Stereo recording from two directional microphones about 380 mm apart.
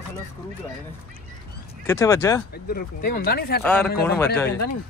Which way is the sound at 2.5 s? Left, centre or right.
Left.